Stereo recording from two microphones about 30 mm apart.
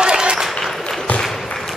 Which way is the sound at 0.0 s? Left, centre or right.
Right.